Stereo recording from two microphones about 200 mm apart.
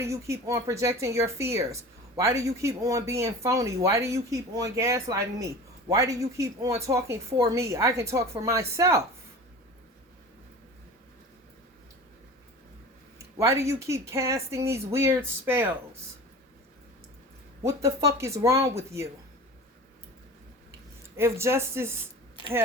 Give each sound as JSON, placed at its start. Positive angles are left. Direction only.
{"t": 0.0, "sound": "a woman's voice", "side_deg": -15}
{"t": 13.1, "sound": "a woman's voice", "side_deg": -15}
{"t": 17.6, "sound": "a woman's voice", "side_deg": -15}
{"t": 21.2, "sound": "a woman's voice", "side_deg": -15}
{"t": 22.4, "sound": "speech", "side_deg": 25}